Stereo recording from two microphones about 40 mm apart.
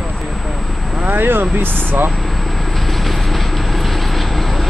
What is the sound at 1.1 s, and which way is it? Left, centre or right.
Speech, right.